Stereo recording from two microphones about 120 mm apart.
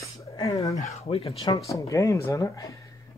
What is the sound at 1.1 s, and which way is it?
Speech, 50° left (ahead or behind).